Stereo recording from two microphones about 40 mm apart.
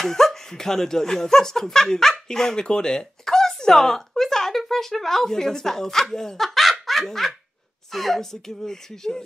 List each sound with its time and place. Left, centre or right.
0.0 s speech: centre